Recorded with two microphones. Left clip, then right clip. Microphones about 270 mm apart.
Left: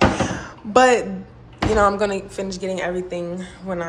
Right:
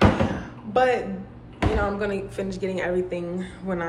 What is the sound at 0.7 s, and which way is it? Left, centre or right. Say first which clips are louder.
A woman's voice: left 6 dB; left.